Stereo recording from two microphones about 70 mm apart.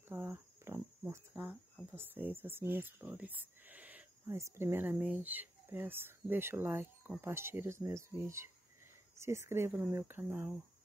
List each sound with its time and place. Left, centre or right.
0.1 s cricket: right
1.3 s speech: right
4.3 s speech: right